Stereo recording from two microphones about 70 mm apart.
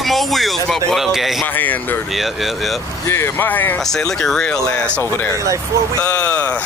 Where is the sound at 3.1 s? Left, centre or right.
Left.